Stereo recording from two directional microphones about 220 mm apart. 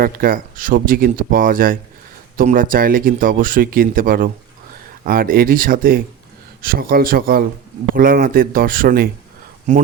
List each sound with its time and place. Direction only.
0.0 s speech: 40° right (ahead or behind)